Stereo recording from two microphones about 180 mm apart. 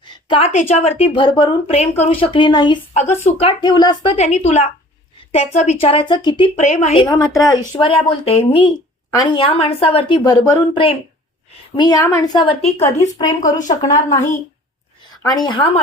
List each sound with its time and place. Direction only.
0.3 s a woman's voice: 30° left (ahead or behind)
2.9 s speech: 35° left (ahead or behind)
6.6 s speech: 40° left (ahead or behind)
7.0 s a woman's voice: 20° left (ahead or behind)
7.8 s a woman's voice: 30° left (ahead or behind)
12.6 s speech: 40° left (ahead or behind)
13.1 s a woman's voice: 20° left (ahead or behind)
15.2 s a woman's voice: 20° left (ahead or behind)